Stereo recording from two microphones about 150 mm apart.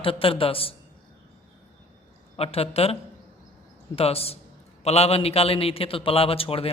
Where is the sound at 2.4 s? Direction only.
40° left (ahead or behind).